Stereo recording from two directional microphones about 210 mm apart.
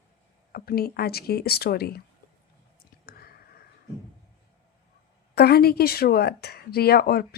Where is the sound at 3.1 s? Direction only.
45° left (ahead or behind).